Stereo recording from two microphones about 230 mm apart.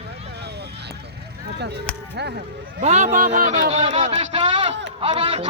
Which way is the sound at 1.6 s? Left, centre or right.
Right.